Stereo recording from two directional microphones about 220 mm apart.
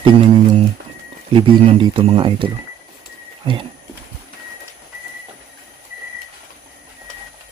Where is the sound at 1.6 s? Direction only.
25° right (ahead or behind).